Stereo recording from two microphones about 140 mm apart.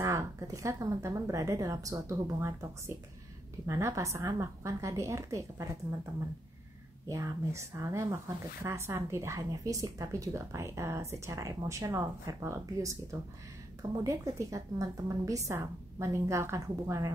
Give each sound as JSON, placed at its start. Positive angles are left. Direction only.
{"t": 0.0, "sound": "a woman's voice", "side_deg": -20}
{"t": 7.1, "sound": "a woman's voice", "side_deg": -20}